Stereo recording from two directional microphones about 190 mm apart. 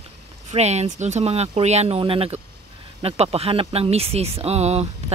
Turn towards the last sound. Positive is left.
turn(degrees=-35)  # may be behind; listen again after turning